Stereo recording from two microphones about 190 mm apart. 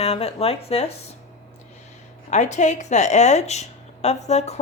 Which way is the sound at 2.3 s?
40° left (ahead or behind).